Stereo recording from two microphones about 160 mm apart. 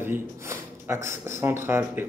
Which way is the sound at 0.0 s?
15° right (ahead or behind).